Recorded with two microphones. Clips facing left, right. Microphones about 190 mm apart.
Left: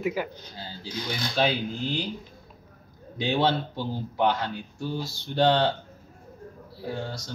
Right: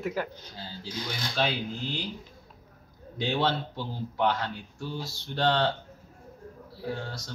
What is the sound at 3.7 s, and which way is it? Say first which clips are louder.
Speech: left 4 dB; 5° left (ahead or behind).